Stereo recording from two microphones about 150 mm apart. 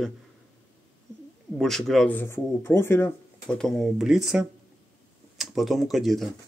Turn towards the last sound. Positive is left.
turn(degrees=0)  # may be behind; listen again after turning